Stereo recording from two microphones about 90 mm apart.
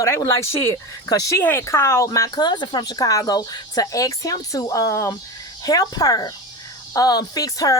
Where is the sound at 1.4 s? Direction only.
25° left (ahead or behind).